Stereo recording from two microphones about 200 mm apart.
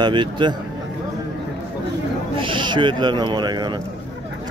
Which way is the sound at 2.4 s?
25° right (ahead or behind).